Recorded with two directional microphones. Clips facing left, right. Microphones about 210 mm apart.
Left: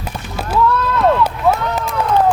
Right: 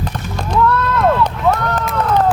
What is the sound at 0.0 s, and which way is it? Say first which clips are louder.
Run: right 2 dB; 5° left (ahead or behind).